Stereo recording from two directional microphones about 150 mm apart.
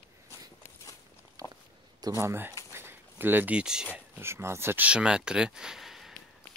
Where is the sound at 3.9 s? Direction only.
15° right (ahead or behind).